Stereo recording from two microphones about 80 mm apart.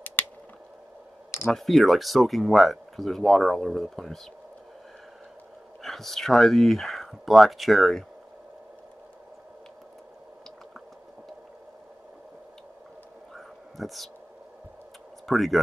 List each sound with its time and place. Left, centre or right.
0.2 s a sound: left
1.5 s speech: centre
5.8 s speech: centre
13.3 s whispering: centre
15.2 s speech: centre